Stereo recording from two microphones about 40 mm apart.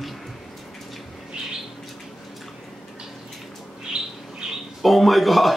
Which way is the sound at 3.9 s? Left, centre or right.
Right.